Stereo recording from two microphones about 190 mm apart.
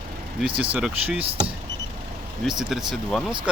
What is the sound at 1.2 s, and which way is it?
Speech, 30° right (ahead or behind).